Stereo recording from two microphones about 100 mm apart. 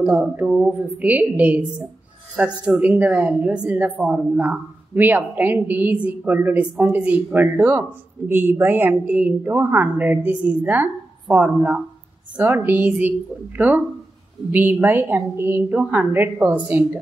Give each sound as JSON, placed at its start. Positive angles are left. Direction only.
{"t": 0.0, "sound": "speech", "side_deg": -15}